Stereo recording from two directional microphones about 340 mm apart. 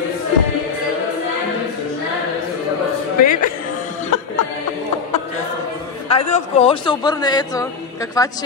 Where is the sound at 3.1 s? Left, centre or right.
Left.